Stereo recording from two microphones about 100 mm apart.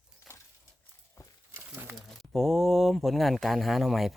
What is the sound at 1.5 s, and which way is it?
Crumpling, 25° right (ahead or behind).